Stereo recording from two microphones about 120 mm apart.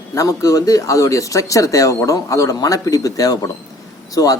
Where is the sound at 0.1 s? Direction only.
30° left (ahead or behind).